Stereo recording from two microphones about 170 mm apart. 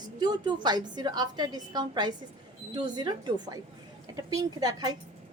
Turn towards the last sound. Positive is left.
turn(degrees=-25)  # may be behind; listen again after turning